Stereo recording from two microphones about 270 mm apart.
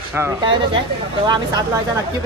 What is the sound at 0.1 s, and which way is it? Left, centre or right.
Speech, centre.